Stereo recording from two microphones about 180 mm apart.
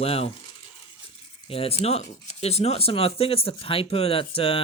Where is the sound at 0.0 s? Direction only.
35° left (ahead or behind).